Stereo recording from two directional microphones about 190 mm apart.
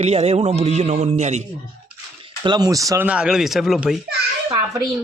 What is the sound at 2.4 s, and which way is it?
Speech, 20° right (ahead or behind).